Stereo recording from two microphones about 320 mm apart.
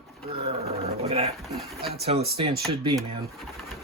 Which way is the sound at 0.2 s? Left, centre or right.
Centre.